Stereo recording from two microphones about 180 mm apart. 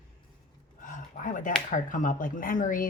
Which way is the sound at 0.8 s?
45° left (ahead or behind).